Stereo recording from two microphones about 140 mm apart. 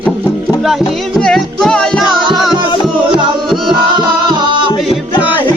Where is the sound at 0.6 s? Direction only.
5° right (ahead or behind).